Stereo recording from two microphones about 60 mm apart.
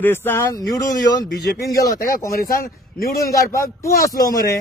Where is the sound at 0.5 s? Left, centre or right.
Left.